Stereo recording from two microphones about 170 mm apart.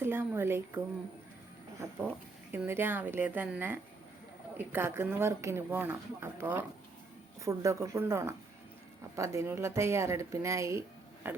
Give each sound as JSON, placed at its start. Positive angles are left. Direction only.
{"t": 0.0, "sound": "speech", "side_deg": -15}
{"t": 2.5, "sound": "speech", "side_deg": -10}